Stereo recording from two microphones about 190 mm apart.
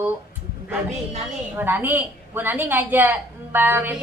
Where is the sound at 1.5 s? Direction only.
10° right (ahead or behind).